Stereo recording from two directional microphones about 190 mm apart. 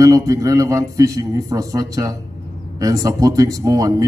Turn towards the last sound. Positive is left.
turn(degrees=-20)  # may be behind; listen again after turning